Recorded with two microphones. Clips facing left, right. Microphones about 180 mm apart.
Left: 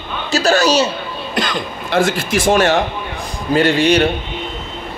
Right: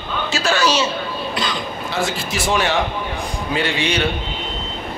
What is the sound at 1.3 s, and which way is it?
A man's voice, 50° left (ahead or behind).